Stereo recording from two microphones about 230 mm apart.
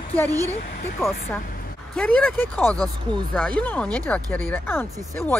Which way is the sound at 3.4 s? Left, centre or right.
Centre.